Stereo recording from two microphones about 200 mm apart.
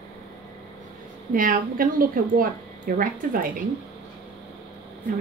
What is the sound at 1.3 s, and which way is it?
Speech, 45° right (ahead or behind).